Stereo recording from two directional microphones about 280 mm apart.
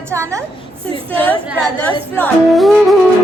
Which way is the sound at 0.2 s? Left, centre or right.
Centre.